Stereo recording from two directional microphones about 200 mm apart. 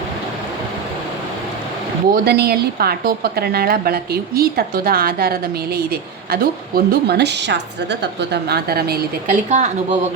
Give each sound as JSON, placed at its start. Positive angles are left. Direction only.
{"t": 2.1, "sound": "a woman's voice", "side_deg": -50}
{"t": 9.5, "sound": "speech", "side_deg": -35}